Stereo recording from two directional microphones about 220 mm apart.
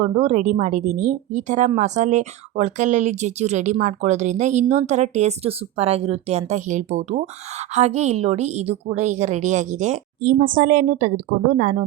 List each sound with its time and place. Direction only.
0.0 s speech: 30° right (ahead or behind)